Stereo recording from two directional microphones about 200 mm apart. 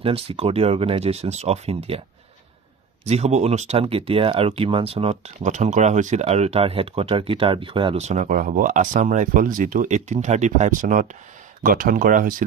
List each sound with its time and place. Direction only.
0.0 s speech: 30° right (ahead or behind)
3.1 s speech: 35° right (ahead or behind)